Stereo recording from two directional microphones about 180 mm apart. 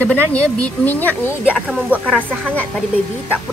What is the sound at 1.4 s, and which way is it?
Speech, 5° right (ahead or behind).